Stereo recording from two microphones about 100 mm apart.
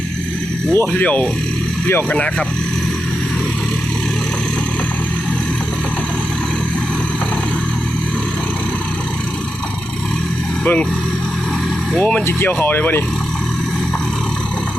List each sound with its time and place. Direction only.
0.7 s speech: 20° left (ahead or behind)
10.6 s speech: 10° left (ahead or behind)
11.9 s speech: 15° left (ahead or behind)